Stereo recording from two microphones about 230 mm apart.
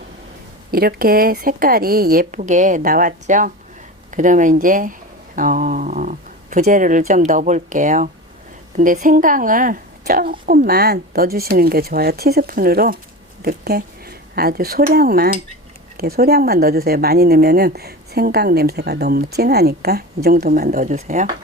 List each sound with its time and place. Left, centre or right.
0.7 s a woman's voice: right
5.4 s a sound: right
7.1 s a woman's voice: right